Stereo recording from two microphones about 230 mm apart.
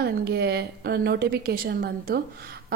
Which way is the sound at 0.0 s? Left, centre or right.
Right.